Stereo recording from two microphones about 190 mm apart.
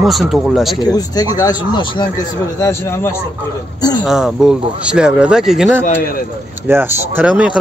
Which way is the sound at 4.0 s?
5° right (ahead or behind).